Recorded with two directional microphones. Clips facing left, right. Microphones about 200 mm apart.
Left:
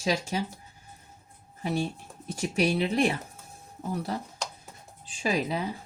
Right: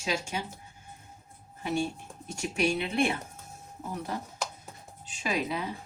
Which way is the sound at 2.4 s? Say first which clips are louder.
Left 3 dB; 35° left (ahead or behind).